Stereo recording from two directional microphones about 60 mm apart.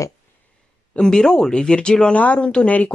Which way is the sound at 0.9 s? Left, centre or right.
Centre.